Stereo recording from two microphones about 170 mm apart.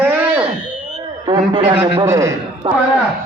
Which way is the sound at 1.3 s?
30° right (ahead or behind).